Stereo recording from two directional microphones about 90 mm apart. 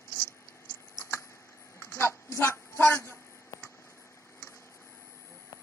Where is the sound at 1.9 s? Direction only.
30° left (ahead or behind).